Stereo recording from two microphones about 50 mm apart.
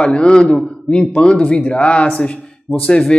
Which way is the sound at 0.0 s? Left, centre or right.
Left.